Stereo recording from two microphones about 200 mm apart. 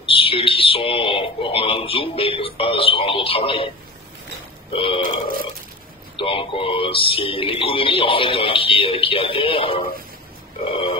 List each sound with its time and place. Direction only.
0.0 s speech: 25° left (ahead or behind)
4.7 s speech: 25° left (ahead or behind)
6.1 s speech: 25° left (ahead or behind)